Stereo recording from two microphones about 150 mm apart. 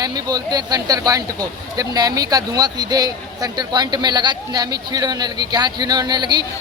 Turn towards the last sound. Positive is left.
turn(degrees=-30)  # may be behind; listen again after turning